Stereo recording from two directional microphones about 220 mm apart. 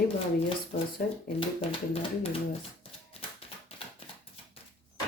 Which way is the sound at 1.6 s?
25° left (ahead or behind).